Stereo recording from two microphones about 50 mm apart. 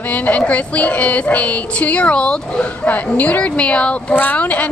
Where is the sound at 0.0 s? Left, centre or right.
Left.